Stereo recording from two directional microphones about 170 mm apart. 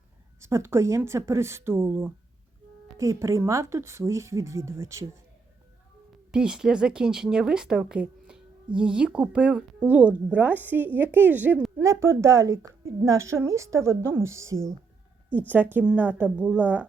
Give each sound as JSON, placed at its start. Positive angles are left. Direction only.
{"t": 0.3, "sound": "speech", "side_deg": -15}
{"t": 6.3, "sound": "speech", "side_deg": -5}